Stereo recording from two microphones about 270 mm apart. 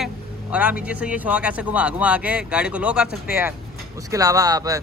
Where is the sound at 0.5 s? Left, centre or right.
Centre.